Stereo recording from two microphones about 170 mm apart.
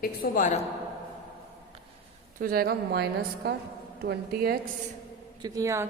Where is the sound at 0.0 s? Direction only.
55° left (ahead or behind).